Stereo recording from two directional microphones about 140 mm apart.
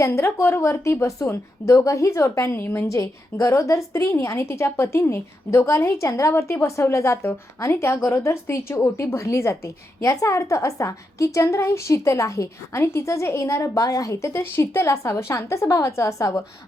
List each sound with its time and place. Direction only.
0.0 s a woman's voice: 20° left (ahead or behind)